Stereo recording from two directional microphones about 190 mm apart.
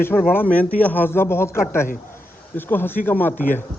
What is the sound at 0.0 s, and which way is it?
Speech, 10° left (ahead or behind).